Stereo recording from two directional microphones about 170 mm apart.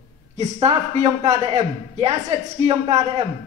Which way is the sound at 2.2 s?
40° right (ahead or behind).